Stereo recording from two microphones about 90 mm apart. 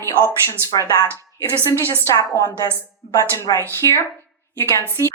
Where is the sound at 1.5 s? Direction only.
30° right (ahead or behind).